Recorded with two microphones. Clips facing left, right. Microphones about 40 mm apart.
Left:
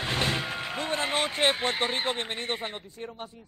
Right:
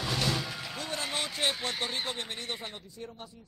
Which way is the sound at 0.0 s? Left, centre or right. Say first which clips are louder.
Left 3 dB; left.